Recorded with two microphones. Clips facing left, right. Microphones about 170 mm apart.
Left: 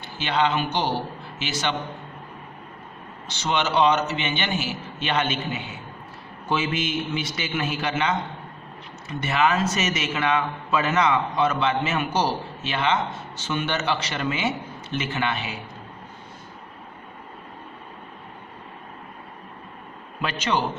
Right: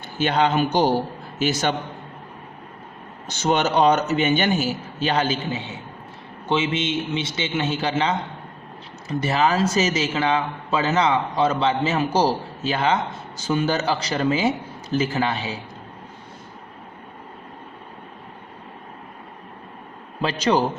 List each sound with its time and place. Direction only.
0.2 s a man's voice: 45° right (ahead or behind)
3.2 s a man's voice: 45° right (ahead or behind)
20.2 s a man's voice: 35° right (ahead or behind)